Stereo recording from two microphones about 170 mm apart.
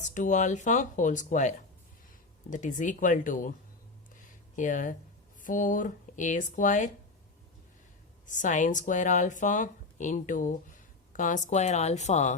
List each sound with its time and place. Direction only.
0.0 s speech: 45° left (ahead or behind)
4.2 s a sound: 50° left (ahead or behind)
5.4 s speech: 50° left (ahead or behind)
8.3 s speech: 50° left (ahead or behind)